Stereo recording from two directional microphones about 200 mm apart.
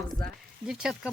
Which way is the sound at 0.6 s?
5° right (ahead or behind).